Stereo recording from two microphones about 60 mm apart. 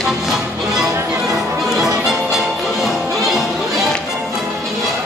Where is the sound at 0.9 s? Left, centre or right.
Right.